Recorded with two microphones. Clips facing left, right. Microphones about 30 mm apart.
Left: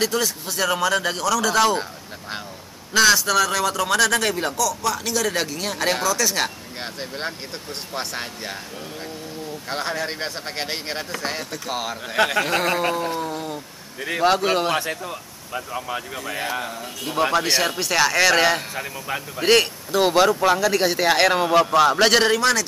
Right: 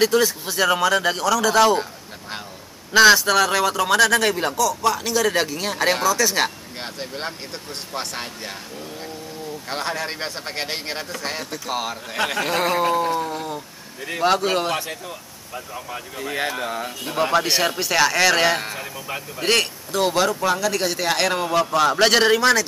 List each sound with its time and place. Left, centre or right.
0.0 s speech: centre
2.9 s a man's voice: centre
9.7 s speech: centre
14.8 s speech: left
17.0 s speech: centre
18.8 s speech: centre